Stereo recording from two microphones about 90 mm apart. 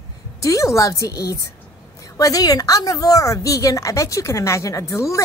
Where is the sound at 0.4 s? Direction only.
35° left (ahead or behind).